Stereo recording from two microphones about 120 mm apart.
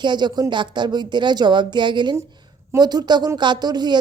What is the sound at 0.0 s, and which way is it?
A woman's voice, 40° right (ahead or behind).